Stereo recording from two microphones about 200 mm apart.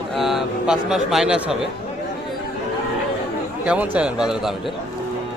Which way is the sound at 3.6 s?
5° right (ahead or behind).